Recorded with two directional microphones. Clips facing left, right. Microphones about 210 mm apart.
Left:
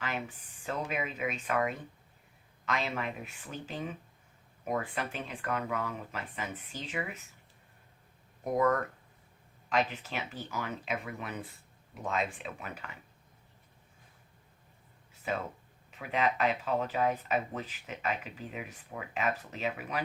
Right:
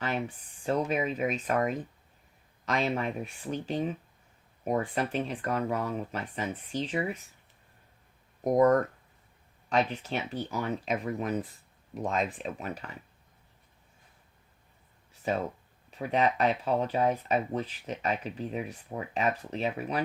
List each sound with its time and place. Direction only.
0.6 s speech: 30° right (ahead or behind)
8.4 s speech: 40° right (ahead or behind)
15.3 s speech: 35° right (ahead or behind)